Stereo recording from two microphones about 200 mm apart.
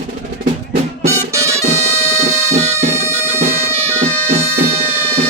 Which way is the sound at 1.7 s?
30° right (ahead or behind).